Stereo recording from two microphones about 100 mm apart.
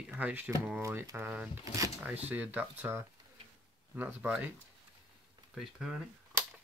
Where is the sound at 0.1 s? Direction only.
15° right (ahead or behind).